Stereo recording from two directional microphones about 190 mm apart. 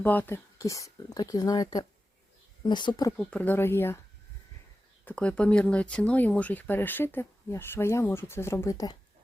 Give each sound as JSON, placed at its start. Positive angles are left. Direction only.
{"t": 0.0, "sound": "speech", "side_deg": 10}
{"t": 3.2, "sound": "speech", "side_deg": 5}
{"t": 5.0, "sound": "speech", "side_deg": 5}